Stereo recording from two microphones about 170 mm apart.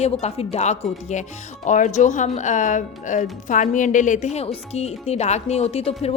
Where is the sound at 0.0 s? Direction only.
40° left (ahead or behind).